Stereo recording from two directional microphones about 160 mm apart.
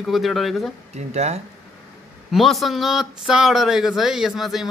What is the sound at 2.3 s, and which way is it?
Speech, centre (ahead or behind).